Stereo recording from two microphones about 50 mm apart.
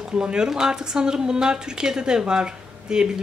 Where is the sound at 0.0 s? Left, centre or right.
Centre.